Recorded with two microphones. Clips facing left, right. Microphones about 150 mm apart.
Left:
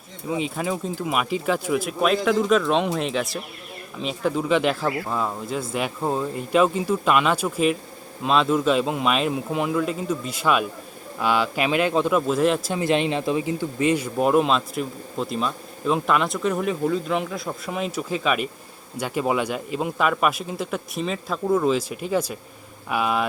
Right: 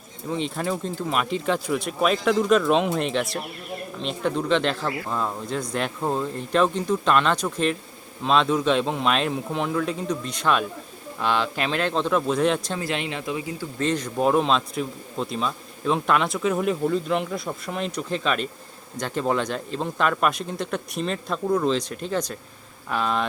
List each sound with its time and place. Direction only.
0.3 s speech: 5° left (ahead or behind)
12.7 s speech: 20° left (ahead or behind)
13.7 s speech: 10° left (ahead or behind)